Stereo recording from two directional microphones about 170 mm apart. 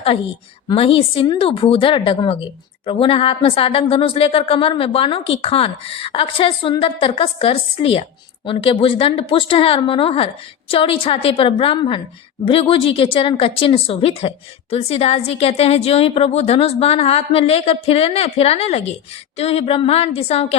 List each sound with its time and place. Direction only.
0.7 s a woman's voice: 30° left (ahead or behind)